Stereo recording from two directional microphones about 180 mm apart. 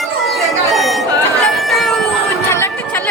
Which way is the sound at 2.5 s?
10° left (ahead or behind).